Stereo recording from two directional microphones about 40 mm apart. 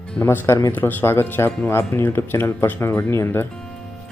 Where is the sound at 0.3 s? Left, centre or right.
Left.